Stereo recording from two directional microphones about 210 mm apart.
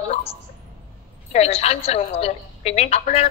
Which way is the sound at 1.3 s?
30° left (ahead or behind).